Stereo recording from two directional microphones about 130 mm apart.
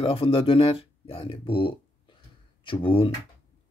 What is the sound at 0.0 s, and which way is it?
Speech, 45° left (ahead or behind).